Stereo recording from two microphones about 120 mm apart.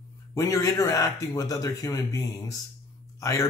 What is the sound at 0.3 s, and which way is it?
Speech, 25° left (ahead or behind).